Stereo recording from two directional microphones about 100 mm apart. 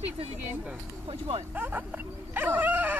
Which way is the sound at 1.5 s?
20° right (ahead or behind).